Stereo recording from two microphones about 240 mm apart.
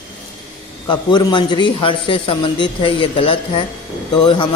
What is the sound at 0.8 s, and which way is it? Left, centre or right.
A man's voice, centre.